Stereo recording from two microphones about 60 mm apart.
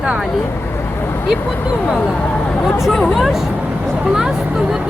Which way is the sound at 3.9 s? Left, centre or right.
Centre.